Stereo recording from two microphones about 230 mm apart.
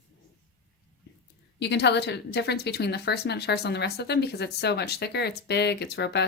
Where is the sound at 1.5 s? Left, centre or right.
Left.